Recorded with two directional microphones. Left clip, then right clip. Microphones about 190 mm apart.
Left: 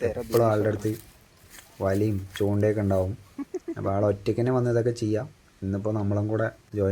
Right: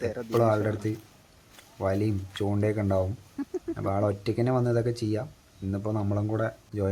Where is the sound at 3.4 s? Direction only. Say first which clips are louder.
Right 1 dB; 15° right (ahead or behind).